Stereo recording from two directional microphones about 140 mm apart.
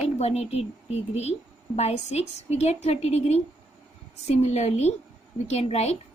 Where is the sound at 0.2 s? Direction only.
50° left (ahead or behind).